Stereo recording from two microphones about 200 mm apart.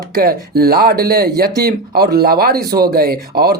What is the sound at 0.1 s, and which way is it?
Speech, 50° right (ahead or behind).